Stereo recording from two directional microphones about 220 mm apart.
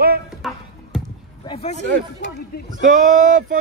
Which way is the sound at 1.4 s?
30° left (ahead or behind).